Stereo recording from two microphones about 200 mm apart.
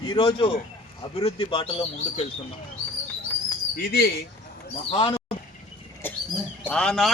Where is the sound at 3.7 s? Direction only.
50° left (ahead or behind).